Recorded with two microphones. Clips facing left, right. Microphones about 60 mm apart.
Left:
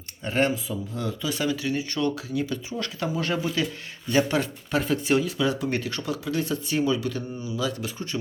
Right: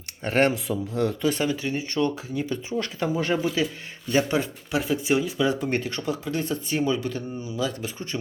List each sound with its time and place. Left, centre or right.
0.3 s speech: right
1.3 s speech: right